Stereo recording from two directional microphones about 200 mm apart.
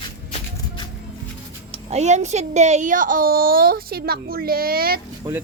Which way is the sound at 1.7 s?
35° right (ahead or behind).